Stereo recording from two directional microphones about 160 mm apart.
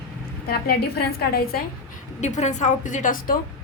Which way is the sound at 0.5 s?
75° left (ahead or behind).